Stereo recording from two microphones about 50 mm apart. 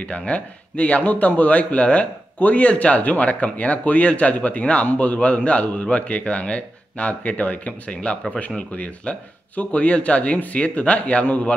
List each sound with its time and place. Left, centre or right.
0.2 s speech: left